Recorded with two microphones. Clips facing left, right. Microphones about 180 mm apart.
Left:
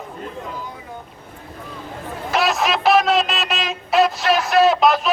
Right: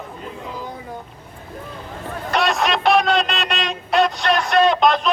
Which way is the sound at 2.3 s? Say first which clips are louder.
Even; centre (ahead or behind).